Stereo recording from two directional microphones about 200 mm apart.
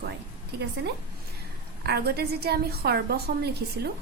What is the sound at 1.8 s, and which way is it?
A woman's voice, 50° right (ahead or behind).